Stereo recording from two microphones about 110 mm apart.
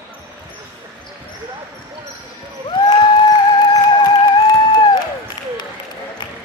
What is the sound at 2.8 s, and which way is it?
Music, 40° left (ahead or behind).